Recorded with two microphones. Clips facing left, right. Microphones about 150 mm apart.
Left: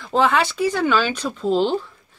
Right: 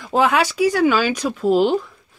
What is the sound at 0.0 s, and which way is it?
Speech, 10° right (ahead or behind).